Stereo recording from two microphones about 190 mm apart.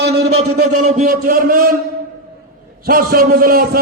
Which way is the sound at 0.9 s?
50° right (ahead or behind).